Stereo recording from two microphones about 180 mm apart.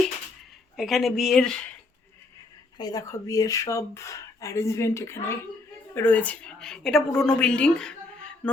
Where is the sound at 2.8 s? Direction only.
20° left (ahead or behind); by 7.9 s 5° left (ahead or behind).